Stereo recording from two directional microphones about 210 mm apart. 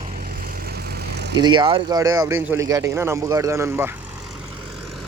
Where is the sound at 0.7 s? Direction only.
50° right (ahead or behind).